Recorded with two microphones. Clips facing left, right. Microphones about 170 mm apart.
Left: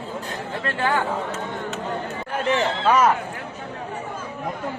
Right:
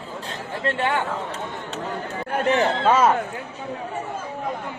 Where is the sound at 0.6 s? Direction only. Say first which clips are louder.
Right 2 dB; 25° right (ahead or behind).